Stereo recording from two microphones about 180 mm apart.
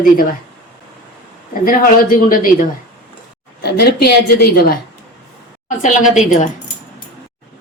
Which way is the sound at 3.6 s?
65° left (ahead or behind).